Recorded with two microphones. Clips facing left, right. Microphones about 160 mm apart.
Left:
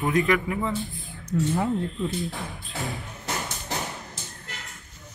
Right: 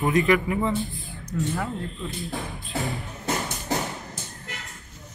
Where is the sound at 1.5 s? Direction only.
20° left (ahead or behind).